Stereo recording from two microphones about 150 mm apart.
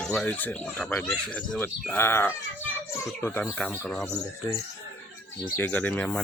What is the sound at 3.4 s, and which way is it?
Speech, 5° left (ahead or behind).